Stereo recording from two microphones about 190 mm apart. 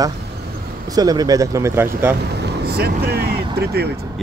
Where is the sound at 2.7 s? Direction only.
55° right (ahead or behind).